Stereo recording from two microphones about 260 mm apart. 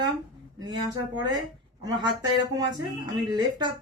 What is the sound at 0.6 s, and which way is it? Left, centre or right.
Speech, centre.